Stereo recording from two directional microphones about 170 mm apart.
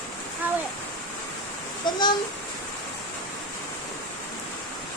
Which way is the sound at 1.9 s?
25° left (ahead or behind).